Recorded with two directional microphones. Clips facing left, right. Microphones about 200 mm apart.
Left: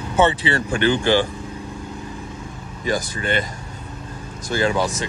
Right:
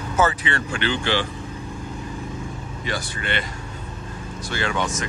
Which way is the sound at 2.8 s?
40° left (ahead or behind).